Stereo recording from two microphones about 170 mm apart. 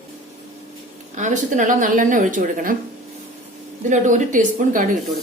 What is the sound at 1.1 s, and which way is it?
Speech, 45° right (ahead or behind).